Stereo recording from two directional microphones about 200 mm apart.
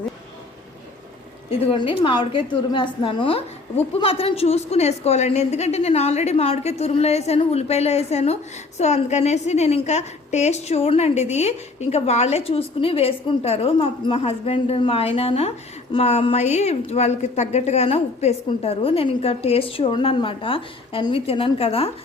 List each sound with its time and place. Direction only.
1.5 s a woman's voice: 30° left (ahead or behind)